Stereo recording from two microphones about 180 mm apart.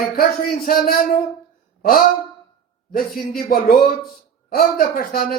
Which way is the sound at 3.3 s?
60° left (ahead or behind).